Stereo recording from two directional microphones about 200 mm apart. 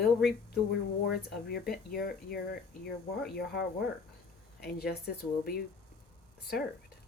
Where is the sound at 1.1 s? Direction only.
50° left (ahead or behind).